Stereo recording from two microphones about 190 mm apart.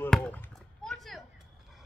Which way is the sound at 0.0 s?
5° left (ahead or behind).